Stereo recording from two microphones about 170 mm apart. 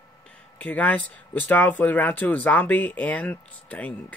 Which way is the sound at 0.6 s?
10° left (ahead or behind).